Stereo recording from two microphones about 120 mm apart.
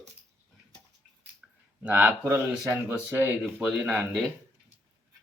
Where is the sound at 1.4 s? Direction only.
5° right (ahead or behind).